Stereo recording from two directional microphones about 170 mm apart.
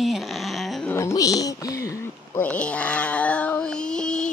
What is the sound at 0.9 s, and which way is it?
Speech, 15° left (ahead or behind).